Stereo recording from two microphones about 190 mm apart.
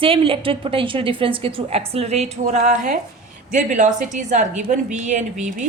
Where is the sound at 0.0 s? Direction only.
30° right (ahead or behind).